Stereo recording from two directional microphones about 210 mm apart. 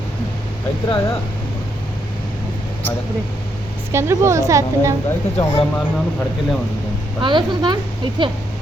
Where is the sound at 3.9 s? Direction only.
10° right (ahead or behind).